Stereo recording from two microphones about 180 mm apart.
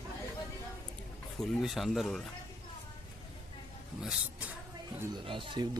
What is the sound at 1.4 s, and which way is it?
Speech, centre (ahead or behind).